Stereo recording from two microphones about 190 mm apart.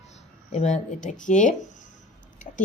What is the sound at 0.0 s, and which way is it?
Speech, 35° left (ahead or behind).